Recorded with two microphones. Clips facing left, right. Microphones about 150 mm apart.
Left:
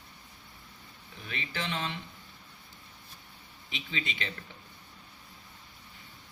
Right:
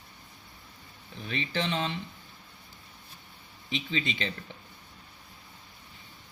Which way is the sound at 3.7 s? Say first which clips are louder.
Right 6 dB; 30° right (ahead or behind).